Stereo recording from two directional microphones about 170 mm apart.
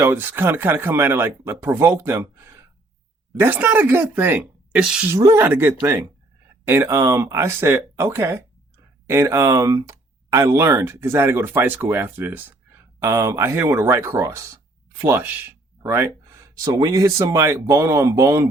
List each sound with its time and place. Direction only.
0.0 s speech: 15° right (ahead or behind)
5.1 s speech: 15° right (ahead or behind)